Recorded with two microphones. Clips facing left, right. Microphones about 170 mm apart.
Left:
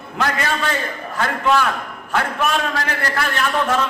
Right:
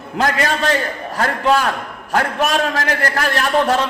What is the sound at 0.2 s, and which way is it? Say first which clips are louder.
A man's voice: right 3 dB; 40° right (ahead or behind).